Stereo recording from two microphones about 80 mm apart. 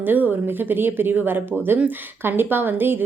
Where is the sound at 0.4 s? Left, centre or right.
Right.